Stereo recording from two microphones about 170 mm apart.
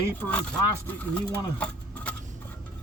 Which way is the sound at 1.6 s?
5° left (ahead or behind).